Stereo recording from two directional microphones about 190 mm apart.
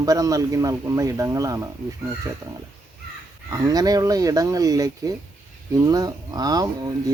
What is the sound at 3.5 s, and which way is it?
A man's voice, 20° right (ahead or behind).